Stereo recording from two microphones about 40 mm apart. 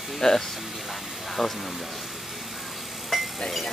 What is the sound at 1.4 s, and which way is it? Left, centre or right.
Speech, centre.